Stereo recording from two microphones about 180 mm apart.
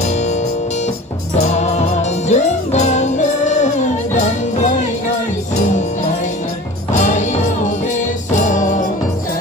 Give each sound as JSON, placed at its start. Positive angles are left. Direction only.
{"t": 1.4, "sound": "music", "side_deg": 40}
{"t": 5.6, "sound": "music", "side_deg": 40}
{"t": 6.9, "sound": "music", "side_deg": 40}